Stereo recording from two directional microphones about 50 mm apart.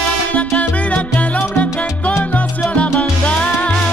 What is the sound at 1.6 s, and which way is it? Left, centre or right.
Salsa music, left.